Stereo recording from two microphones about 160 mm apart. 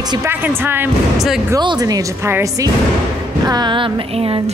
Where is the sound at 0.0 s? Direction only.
25° right (ahead or behind).